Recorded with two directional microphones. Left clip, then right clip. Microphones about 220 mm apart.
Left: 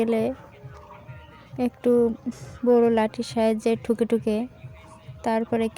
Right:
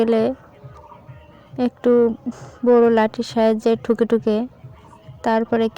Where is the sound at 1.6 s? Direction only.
20° right (ahead or behind).